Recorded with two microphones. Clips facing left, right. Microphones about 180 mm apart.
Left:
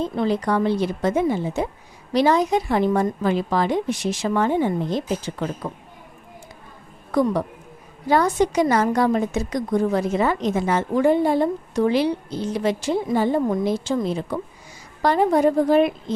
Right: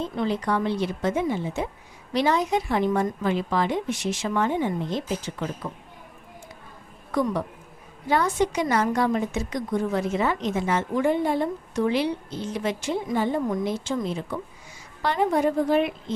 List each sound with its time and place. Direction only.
0.0 s a woman's voice: 40° left (ahead or behind)
7.1 s a woman's voice: 35° left (ahead or behind)